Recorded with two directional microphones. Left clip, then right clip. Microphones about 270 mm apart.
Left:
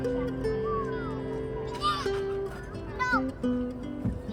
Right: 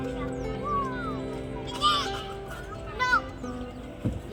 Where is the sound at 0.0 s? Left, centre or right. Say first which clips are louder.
Left 3 dB; left.